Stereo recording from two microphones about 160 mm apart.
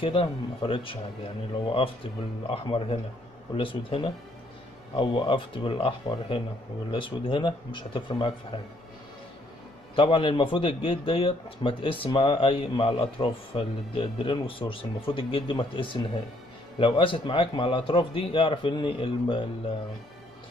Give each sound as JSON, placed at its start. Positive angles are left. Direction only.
{"t": 0.0, "sound": "a man's voice", "side_deg": 35}
{"t": 2.5, "sound": "a man's voice", "side_deg": 35}
{"t": 9.9, "sound": "a man's voice", "side_deg": 30}